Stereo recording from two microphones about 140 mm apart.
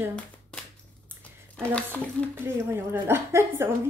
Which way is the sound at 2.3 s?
15° right (ahead or behind).